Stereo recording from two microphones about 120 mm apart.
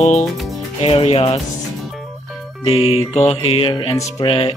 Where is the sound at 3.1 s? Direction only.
55° left (ahead or behind).